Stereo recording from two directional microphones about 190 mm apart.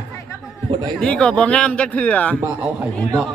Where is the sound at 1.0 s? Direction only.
5° left (ahead or behind).